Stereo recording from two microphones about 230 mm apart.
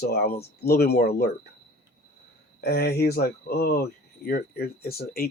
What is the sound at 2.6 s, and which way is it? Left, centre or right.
Speech, left.